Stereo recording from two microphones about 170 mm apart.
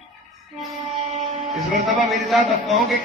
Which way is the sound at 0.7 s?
40° right (ahead or behind).